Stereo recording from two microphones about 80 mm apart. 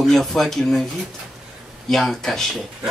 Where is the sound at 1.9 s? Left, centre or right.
Centre.